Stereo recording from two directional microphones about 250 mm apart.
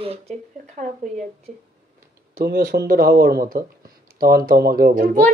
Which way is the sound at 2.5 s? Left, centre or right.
Right.